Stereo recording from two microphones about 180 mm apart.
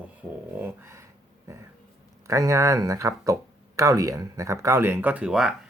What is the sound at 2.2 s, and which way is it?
Speech, 15° right (ahead or behind).